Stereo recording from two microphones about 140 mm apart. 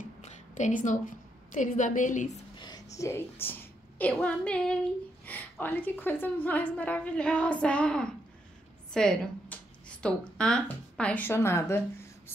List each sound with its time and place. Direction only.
0.2 s a woman's voice: 60° left (ahead or behind)
2.5 s a sound: 30° left (ahead or behind)
3.0 s a woman's voice: 15° left (ahead or behind)